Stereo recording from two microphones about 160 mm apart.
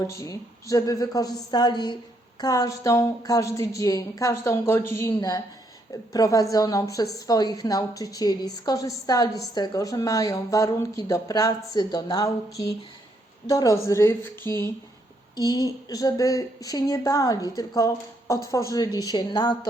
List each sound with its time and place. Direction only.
0.0 s speech: 20° left (ahead or behind)
15.4 s speech: 20° left (ahead or behind)